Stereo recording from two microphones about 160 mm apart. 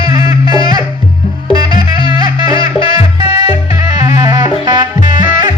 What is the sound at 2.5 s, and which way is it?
Music, 35° left (ahead or behind).